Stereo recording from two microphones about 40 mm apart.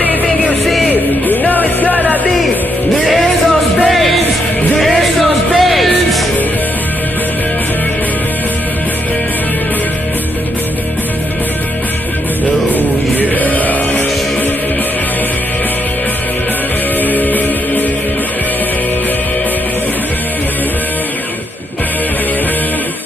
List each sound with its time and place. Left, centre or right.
0.8 s music: left
3.1 s music: centre
12.6 s music: left
17.0 s music: left